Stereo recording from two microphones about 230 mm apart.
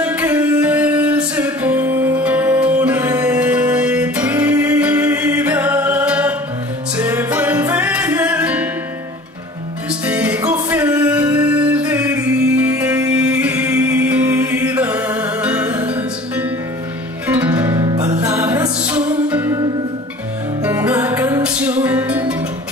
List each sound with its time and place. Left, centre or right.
0.0 s music: centre
10.0 s music: centre
20.6 s music: centre